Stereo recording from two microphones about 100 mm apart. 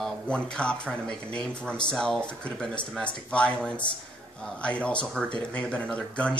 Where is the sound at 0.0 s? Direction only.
10° left (ahead or behind).